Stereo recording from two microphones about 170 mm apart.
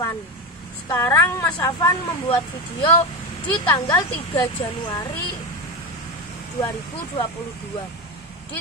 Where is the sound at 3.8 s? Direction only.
30° left (ahead or behind).